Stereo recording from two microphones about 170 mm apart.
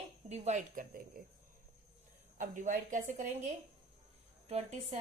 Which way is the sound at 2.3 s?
50° right (ahead or behind).